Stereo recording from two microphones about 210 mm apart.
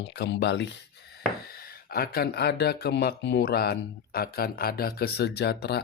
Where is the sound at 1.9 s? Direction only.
45° left (ahead or behind).